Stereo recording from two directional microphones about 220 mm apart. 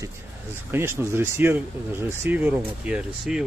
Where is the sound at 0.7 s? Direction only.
10° right (ahead or behind).